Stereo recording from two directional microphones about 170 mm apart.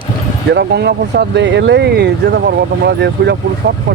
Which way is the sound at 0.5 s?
75° right (ahead or behind).